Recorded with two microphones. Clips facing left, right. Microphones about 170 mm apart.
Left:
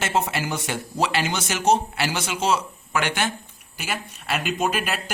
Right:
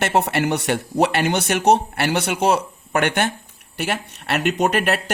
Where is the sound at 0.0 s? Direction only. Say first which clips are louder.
Right 5 dB; 65° right (ahead or behind).